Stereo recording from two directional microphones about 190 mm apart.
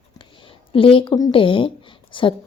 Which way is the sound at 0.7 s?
30° left (ahead or behind).